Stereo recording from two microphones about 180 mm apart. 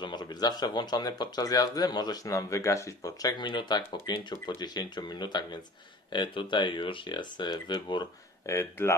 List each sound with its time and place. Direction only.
0.0 s speech: 25° left (ahead or behind)